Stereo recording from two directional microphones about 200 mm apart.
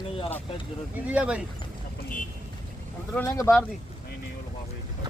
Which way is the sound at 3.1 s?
15° left (ahead or behind).